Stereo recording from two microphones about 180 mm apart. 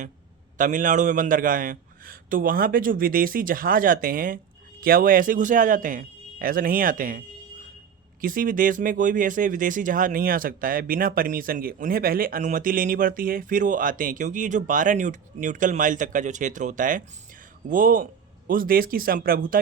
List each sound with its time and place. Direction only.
0.6 s speech: 45° right (ahead or behind)
8.2 s speech: 50° right (ahead or behind)